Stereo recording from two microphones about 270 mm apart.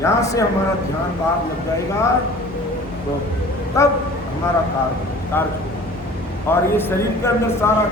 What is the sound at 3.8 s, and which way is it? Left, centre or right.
Speech, centre.